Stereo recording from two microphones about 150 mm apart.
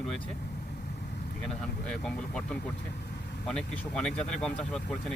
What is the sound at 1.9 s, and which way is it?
Speech, 5° left (ahead or behind).